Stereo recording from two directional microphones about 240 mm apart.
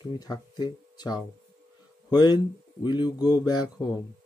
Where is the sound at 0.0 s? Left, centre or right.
Centre.